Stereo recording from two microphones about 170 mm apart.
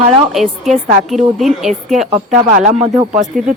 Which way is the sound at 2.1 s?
35° right (ahead or behind).